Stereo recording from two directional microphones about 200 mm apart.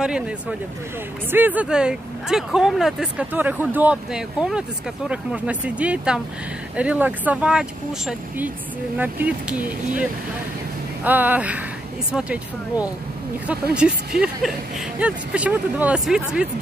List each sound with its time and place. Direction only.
0.0 s speech: 5° right (ahead or behind)
8.9 s speech: 10° right (ahead or behind)
11.1 s speech: 10° right (ahead or behind)